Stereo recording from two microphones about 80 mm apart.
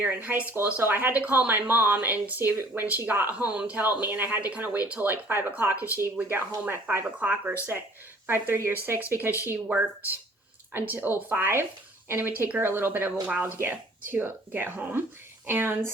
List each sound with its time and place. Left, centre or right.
0.0 s speech: right
8.3 s speech: right
10.7 s speech: right